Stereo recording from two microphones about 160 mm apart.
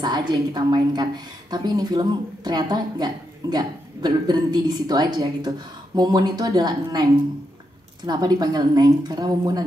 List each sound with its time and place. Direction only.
0.0 s a woman's voice: 25° right (ahead or behind)